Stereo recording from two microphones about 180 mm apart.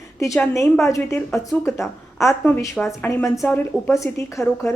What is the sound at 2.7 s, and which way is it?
A woman's voice, 5° left (ahead or behind).